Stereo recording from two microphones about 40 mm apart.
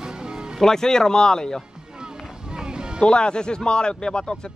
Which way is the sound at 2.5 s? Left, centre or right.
Right.